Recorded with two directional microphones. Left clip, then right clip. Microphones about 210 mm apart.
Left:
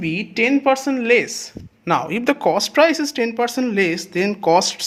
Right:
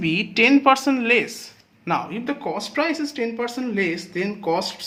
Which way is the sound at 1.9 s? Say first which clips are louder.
Left 6 dB; 35° left (ahead or behind).